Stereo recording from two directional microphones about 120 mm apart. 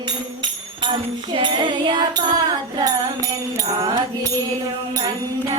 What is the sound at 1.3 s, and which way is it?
Music, 40° right (ahead or behind).